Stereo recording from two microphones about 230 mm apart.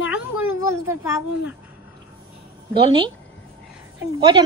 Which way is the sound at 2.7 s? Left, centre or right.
Right.